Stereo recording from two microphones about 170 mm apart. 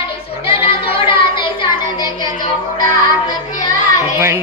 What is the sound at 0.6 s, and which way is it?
Child singing, 30° left (ahead or behind).